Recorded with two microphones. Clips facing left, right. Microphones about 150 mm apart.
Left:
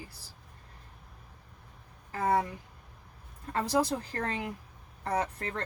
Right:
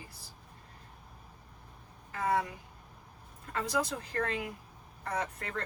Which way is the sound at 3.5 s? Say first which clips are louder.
Left 4 dB; 35° left (ahead or behind).